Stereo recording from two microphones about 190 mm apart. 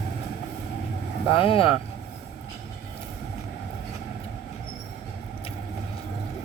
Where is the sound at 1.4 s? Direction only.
30° left (ahead or behind).